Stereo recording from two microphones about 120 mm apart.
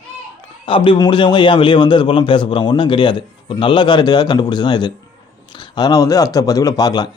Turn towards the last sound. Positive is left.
turn(degrees=35)  # may be behind; listen again after turning